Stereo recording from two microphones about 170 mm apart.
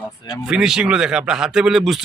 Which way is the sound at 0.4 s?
5° right (ahead or behind).